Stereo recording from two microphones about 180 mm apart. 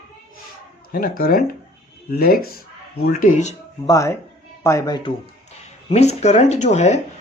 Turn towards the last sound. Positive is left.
turn(degrees=40)  # may be behind; listen again after turning